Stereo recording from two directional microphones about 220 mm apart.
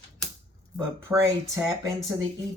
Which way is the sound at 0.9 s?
15° right (ahead or behind).